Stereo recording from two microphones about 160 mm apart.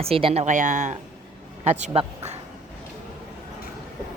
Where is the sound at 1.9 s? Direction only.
35° right (ahead or behind).